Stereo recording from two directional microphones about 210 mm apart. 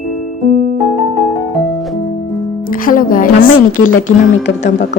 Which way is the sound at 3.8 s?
40° left (ahead or behind).